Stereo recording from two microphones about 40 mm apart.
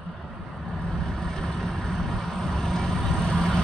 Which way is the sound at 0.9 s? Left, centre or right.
Centre.